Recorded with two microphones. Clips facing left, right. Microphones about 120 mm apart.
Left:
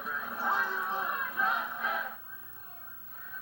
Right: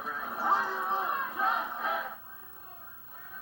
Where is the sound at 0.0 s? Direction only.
35° right (ahead or behind).